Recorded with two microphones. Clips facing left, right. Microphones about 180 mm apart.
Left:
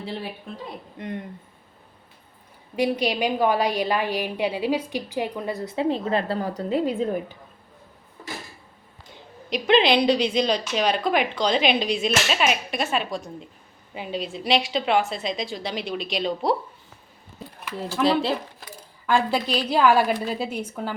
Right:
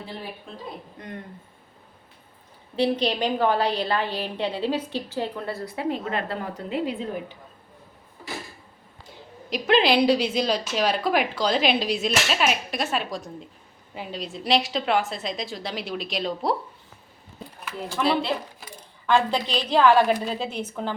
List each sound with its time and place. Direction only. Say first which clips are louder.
0.9 s speech: left 5 dB; 20° left (ahead or behind)
2.7 s a woman's voice: even; 10° left (ahead or behind); by 6.9 s 40° left (ahead or behind)
9.5 s speech: left 1 dB; centre (ahead or behind)
18.0 s speech: left 3 dB; 35° left (ahead or behind)
19.0 s a woman's voice: even; 5° left (ahead or behind)